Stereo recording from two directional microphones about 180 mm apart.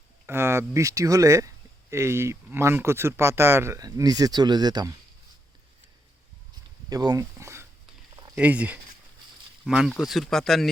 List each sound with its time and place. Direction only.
0.3 s speech: 15° right (ahead or behind)
6.9 s speech: 20° right (ahead or behind); by 10.7 s centre (ahead or behind)